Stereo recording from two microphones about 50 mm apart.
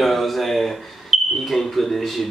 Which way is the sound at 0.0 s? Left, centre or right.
Centre.